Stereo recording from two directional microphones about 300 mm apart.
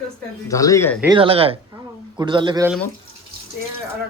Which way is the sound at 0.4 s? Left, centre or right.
Centre.